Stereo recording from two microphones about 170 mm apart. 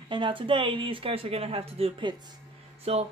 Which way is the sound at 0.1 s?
30° right (ahead or behind).